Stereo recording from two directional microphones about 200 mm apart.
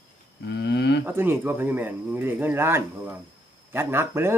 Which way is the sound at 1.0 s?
10° right (ahead or behind).